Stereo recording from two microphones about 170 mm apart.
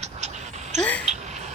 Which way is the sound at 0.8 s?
5° left (ahead or behind).